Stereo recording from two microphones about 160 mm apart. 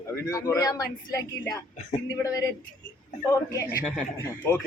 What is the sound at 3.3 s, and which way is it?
Speech, 20° left (ahead or behind).